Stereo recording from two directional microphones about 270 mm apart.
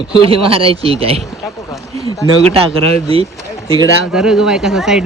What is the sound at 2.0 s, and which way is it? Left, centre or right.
Speech, centre.